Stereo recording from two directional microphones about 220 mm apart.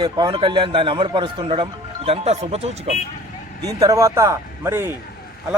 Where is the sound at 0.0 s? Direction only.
20° right (ahead or behind).